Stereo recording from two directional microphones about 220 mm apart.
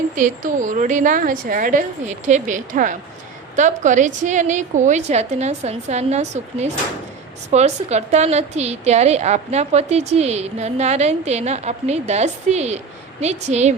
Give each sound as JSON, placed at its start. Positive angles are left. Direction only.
{"t": 0.2, "sound": "a woman's voice", "side_deg": -35}